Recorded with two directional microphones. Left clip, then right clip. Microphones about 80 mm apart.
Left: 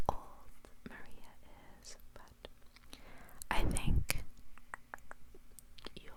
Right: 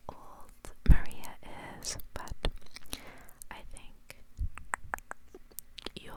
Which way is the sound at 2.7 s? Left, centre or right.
Right.